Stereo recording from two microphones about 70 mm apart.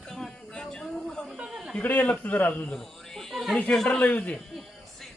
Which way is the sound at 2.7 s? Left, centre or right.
Centre.